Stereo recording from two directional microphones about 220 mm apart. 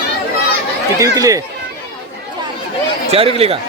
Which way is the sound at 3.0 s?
25° right (ahead or behind).